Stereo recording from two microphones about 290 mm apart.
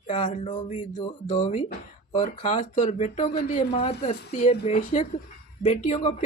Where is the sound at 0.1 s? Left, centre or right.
Left.